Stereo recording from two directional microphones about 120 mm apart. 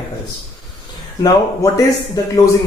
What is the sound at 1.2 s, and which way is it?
Speech, 25° left (ahead or behind).